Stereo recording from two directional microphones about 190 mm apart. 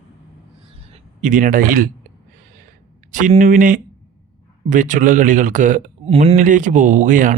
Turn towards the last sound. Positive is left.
turn(degrees=-45)  # may be behind; listen again after turning